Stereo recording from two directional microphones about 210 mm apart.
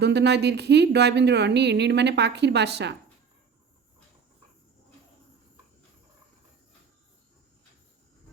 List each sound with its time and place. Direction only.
0.0 s a woman's voice: 55° right (ahead or behind)